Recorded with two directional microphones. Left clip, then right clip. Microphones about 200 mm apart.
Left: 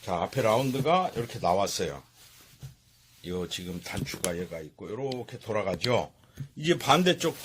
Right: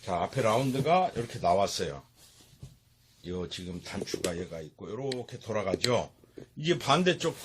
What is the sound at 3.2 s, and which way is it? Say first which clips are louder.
A man's voice: left 3 dB; 25° left (ahead or behind).